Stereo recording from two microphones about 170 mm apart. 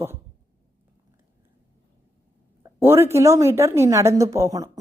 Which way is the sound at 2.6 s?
15° right (ahead or behind).